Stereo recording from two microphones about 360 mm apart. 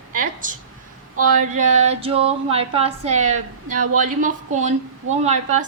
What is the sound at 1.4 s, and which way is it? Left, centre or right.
Speech, centre.